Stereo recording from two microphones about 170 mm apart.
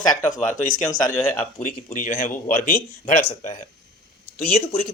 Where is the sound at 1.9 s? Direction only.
45° left (ahead or behind).